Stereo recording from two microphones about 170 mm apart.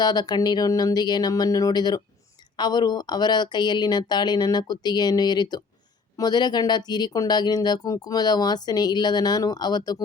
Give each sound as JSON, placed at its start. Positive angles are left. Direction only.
{"t": 0.0, "sound": "speech", "side_deg": 25}